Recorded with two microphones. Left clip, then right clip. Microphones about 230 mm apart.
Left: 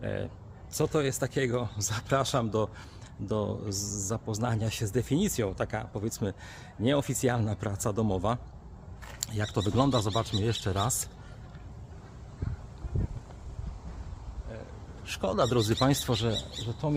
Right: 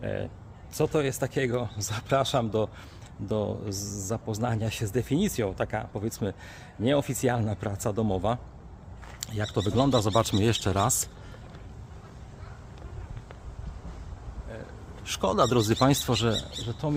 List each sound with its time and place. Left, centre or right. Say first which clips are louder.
0.0 s a man's voice: right 2 dB; centre
10.1 s speech: right 6 dB; right
15.0 s speech: right 4 dB; right
16.8 s speech: right 1 dB; centre